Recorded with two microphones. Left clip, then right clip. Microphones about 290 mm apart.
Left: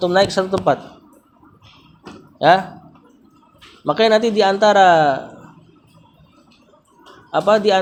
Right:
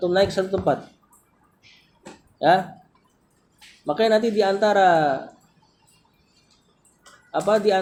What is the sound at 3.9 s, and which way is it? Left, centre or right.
Speech, left.